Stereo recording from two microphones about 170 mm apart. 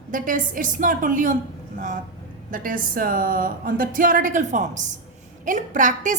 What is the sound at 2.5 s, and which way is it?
A woman's voice, 55° right (ahead or behind).